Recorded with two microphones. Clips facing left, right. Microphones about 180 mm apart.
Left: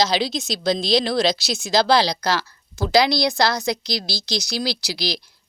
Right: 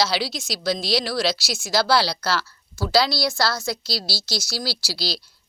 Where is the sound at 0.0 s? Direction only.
20° left (ahead or behind).